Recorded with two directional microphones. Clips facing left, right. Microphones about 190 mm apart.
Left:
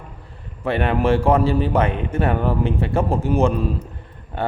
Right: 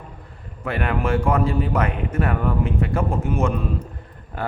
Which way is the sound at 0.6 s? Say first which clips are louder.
Left 4 dB; 30° left (ahead or behind).